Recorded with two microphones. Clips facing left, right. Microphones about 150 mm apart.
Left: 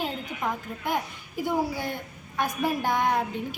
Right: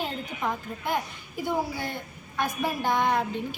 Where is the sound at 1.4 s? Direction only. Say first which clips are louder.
Left 2 dB; 10° left (ahead or behind).